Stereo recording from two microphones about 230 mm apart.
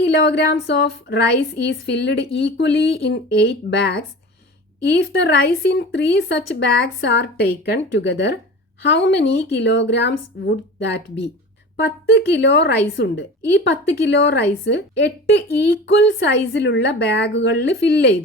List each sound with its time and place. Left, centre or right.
0.0 s speech: left